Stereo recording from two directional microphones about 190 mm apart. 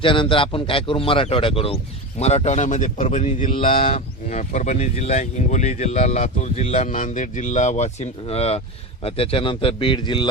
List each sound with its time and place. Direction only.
0.0 s a man's voice: 25° left (ahead or behind)